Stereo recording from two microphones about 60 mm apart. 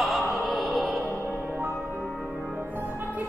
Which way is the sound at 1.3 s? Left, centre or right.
Right.